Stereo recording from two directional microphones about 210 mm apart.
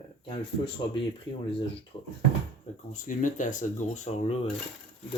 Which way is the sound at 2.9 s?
35° left (ahead or behind).